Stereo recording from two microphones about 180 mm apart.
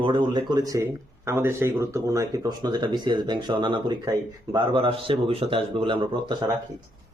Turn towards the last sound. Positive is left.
turn(degrees=-30)  # may be behind; listen again after turning